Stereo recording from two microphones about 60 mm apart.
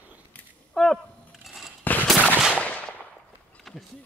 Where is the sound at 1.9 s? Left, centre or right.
Left.